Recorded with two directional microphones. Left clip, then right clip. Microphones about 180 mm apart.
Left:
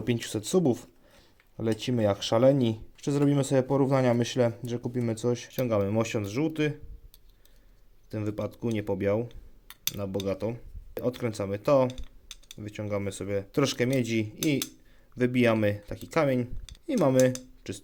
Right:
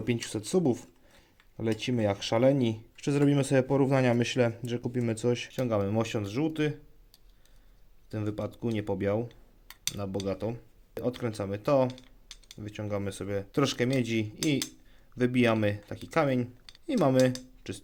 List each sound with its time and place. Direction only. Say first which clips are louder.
0.0 s speech: left 2 dB; 5° left (ahead or behind)
8.1 s speech: left 2 dB; centre (ahead or behind)
11.9 s typing: left 2 dB; 25° left (ahead or behind)
12.5 s speech: left 2 dB; 5° left (ahead or behind)